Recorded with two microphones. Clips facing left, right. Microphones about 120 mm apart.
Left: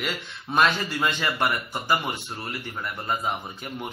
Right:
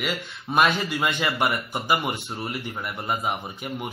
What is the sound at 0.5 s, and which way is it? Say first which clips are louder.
Speech: right 1 dB; 15° right (ahead or behind).